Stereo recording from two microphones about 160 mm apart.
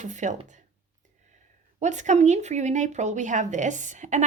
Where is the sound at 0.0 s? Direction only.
50° right (ahead or behind).